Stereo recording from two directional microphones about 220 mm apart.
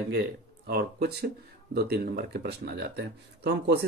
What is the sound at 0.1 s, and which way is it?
Speech, 50° right (ahead or behind).